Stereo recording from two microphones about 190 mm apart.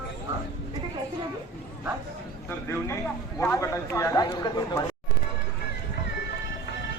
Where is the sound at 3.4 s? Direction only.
15° left (ahead or behind).